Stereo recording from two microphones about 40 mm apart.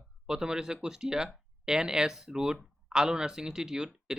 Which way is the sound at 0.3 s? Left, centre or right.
Centre.